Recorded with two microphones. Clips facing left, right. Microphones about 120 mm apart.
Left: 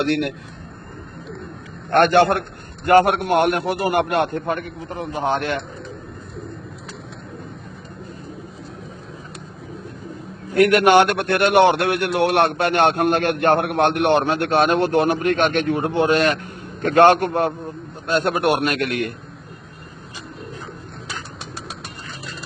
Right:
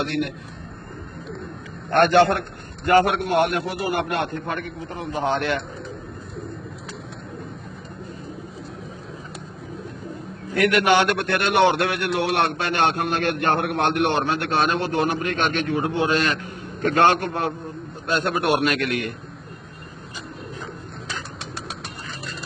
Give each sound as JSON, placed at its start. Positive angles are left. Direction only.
{"t": 0.0, "sound": "a man's voice", "side_deg": 70}
{"t": 1.9, "sound": "a man's voice", "side_deg": 55}
{"t": 10.7, "sound": "a man's voice", "side_deg": 55}
{"t": 18.5, "sound": "a man's voice", "side_deg": 50}